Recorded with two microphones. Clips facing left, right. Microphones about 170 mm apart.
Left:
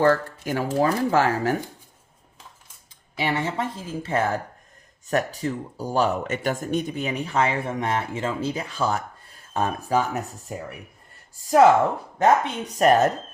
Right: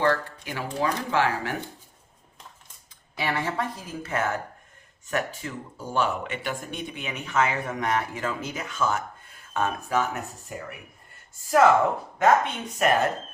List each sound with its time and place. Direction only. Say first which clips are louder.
0.0 s speech: left 5 dB; 45° left (ahead or behind)
3.2 s speech: left 2 dB; 25° left (ahead or behind)
11.4 s speech: left 3 dB; 30° left (ahead or behind)